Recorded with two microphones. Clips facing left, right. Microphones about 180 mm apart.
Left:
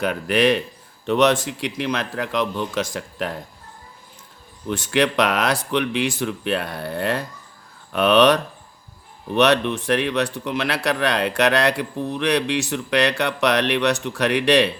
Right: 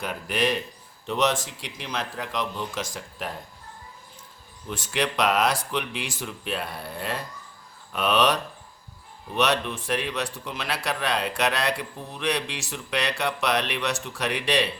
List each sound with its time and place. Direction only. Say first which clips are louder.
0.0 s speech: left 8 dB; 70° left (ahead or behind)
4.7 s speech: left 8 dB; 70° left (ahead or behind)